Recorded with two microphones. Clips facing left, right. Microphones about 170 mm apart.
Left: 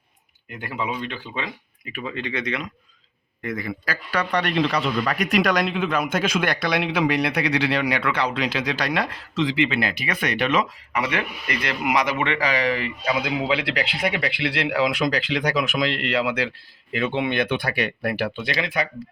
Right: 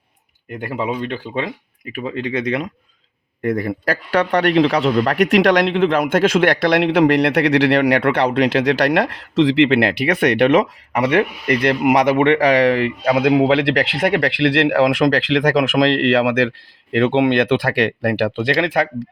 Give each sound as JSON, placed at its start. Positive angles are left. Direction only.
{"t": 0.5, "sound": "speech", "side_deg": -45}
{"t": 2.0, "sound": "speech", "side_deg": -40}
{"t": 3.4, "sound": "speech", "side_deg": -60}
{"t": 4.9, "sound": "speech", "side_deg": -65}